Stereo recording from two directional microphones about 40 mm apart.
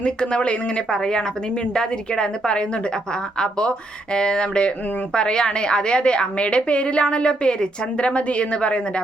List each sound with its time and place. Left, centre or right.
0.0 s a woman's voice: left